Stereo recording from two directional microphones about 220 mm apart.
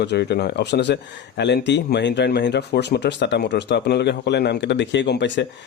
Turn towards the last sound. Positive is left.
turn(degrees=55)  # may be behind; listen again after turning